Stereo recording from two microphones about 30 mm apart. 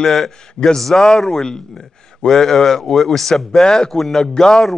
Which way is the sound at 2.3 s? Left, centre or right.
Centre.